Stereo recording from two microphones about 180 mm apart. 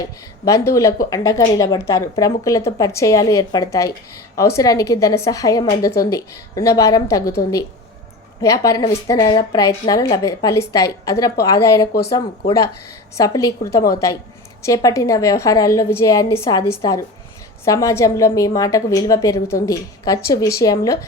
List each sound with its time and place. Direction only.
0.0 s a woman's voice: 15° left (ahead or behind)
13.1 s a woman's voice: 20° left (ahead or behind)